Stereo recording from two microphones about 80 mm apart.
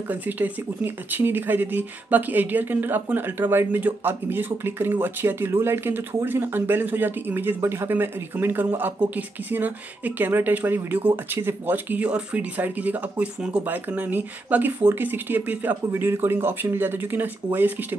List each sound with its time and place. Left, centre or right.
0.1 s speech: right